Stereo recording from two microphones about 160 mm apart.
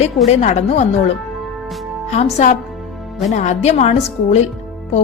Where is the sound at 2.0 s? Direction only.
45° left (ahead or behind).